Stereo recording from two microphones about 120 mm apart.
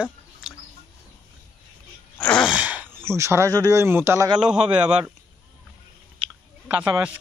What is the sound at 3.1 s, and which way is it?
Speech, 25° right (ahead or behind).